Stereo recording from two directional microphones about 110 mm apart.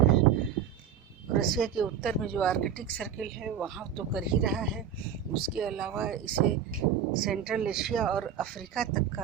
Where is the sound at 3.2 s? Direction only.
5° right (ahead or behind).